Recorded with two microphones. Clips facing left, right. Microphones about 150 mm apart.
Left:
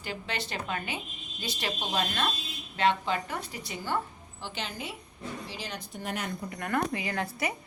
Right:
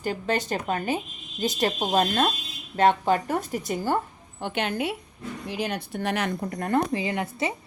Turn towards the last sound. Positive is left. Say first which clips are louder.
# right 5 dB
turn(degrees=-25)  # may be behind; listen again after turning